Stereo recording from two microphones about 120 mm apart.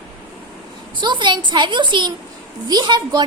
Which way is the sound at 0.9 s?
40° right (ahead or behind).